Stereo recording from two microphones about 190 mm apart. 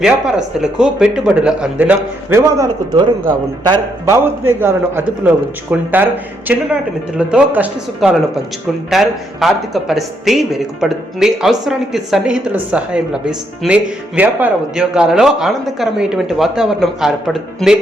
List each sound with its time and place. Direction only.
0.0 s a man's voice: 5° right (ahead or behind)